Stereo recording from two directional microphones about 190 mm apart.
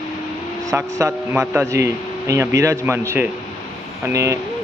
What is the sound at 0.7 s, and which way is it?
Speech, 15° right (ahead or behind).